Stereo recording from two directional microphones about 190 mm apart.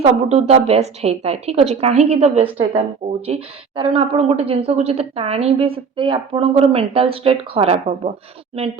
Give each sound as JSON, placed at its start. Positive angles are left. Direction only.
{"t": 0.0, "sound": "a woman's voice", "side_deg": -30}